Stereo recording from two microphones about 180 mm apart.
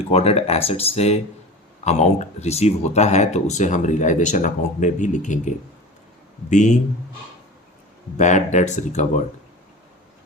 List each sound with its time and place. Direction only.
0.0 s speech: 35° left (ahead or behind)
8.2 s speech: 40° left (ahead or behind)